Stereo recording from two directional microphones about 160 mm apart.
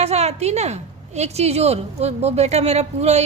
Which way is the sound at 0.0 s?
40° right (ahead or behind).